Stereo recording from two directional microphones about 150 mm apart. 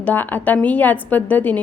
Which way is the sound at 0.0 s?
10° left (ahead or behind).